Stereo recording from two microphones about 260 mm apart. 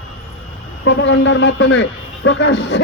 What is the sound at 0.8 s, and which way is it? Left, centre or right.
A man's voice, left.